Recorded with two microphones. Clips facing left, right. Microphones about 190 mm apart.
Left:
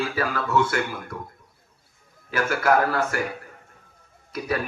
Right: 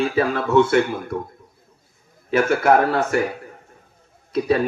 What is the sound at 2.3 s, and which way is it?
Speech, 25° right (ahead or behind).